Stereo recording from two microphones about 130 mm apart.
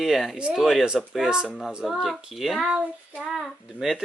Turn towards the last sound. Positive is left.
turn(degrees=0)  # may be behind; listen again after turning